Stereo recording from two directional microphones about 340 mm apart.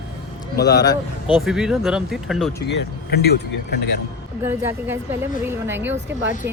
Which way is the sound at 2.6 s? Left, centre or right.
Left.